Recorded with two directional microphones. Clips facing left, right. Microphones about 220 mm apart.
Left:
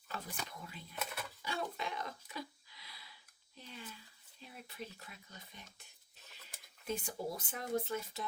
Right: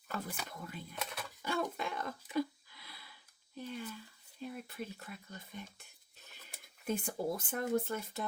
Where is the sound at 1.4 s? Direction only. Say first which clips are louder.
Right 5 dB; 55° right (ahead or behind).